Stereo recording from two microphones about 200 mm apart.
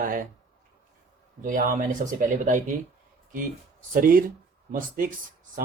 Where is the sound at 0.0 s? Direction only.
45° right (ahead or behind).